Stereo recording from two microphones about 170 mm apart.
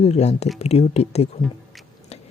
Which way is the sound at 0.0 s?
40° left (ahead or behind).